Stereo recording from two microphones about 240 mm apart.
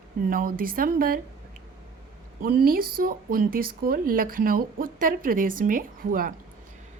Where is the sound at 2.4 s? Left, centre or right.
Right.